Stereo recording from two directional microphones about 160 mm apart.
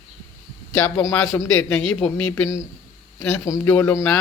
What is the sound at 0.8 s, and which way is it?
Speech, 10° left (ahead or behind).